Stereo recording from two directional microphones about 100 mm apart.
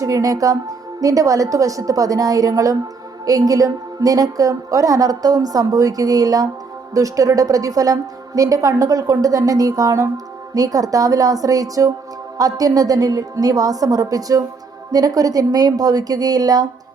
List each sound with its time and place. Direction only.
0.0 s a woman's voice: 35° right (ahead or behind)